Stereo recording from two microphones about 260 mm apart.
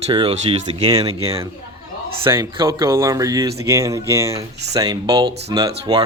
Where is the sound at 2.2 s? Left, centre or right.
Centre.